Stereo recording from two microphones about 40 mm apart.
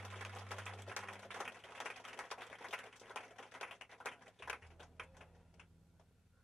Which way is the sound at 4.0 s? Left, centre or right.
Centre.